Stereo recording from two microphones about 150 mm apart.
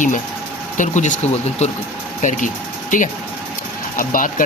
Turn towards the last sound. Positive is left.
turn(degrees=65)  # may be behind; listen again after turning